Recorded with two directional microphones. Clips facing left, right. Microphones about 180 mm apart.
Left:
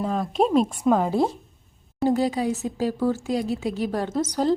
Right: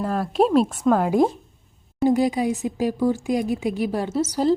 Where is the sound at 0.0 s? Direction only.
5° right (ahead or behind).